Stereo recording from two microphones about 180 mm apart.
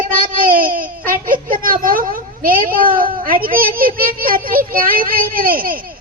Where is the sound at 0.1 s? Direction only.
50° right (ahead or behind).